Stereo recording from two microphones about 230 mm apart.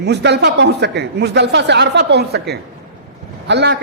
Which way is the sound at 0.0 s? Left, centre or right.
Right.